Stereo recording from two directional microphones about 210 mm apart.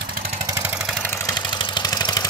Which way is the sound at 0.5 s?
5° right (ahead or behind).